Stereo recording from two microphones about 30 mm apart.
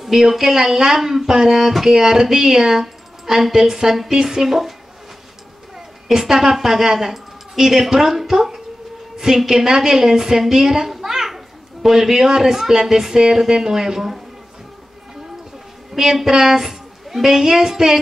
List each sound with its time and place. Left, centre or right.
0.1 s speech: centre
6.0 s a child's voice: centre
15.9 s a woman's voice: centre